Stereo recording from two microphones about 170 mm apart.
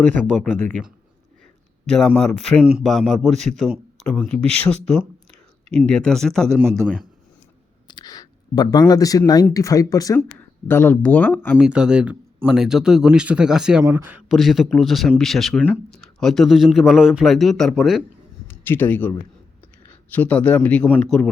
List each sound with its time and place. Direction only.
0.1 s speech: 10° left (ahead or behind)
1.9 s speech: 5° left (ahead or behind)
7.9 s speech: 25° left (ahead or behind)
11.5 s speech: 5° right (ahead or behind)
18.4 s a man's voice: 15° left (ahead or behind)
20.1 s speech: 10° left (ahead or behind)